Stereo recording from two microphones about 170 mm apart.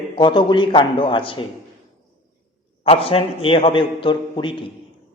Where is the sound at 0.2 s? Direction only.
30° left (ahead or behind).